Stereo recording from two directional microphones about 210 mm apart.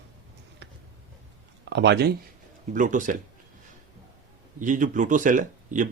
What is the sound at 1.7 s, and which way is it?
Speech, 55° right (ahead or behind).